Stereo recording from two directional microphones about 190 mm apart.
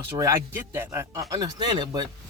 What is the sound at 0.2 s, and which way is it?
Speech, 15° right (ahead or behind).